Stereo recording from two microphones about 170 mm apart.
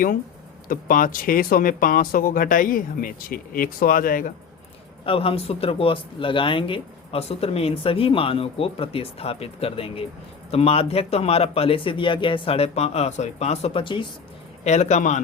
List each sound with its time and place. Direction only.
0.7 s speech: 55° left (ahead or behind)
5.0 s speech: 35° left (ahead or behind)
14.6 s a man's voice: 40° left (ahead or behind)